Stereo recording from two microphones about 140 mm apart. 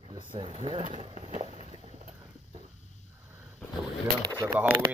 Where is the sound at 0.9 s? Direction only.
60° right (ahead or behind).